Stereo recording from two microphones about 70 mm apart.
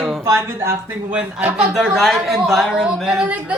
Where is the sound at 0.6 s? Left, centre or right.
Right.